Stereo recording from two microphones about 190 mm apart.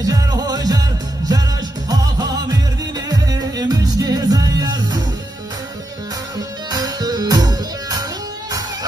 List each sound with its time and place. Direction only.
0.0 s music: 20° right (ahead or behind)
1.9 s music: 20° right (ahead or behind)
6.7 s music: 20° right (ahead or behind)